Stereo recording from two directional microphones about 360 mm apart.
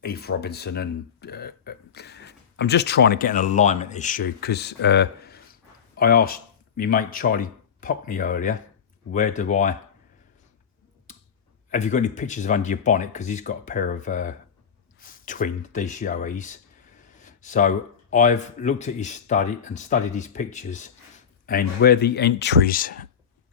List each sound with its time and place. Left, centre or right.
0.0 s speech: left
11.7 s speech: left